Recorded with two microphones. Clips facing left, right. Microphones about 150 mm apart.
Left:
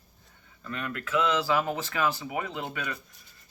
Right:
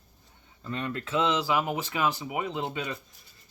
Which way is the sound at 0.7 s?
25° right (ahead or behind).